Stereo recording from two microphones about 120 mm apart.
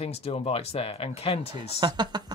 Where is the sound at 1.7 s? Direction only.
40° right (ahead or behind).